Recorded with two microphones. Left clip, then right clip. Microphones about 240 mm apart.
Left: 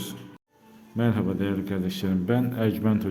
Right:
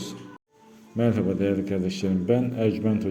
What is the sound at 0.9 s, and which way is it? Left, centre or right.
A man's voice, centre.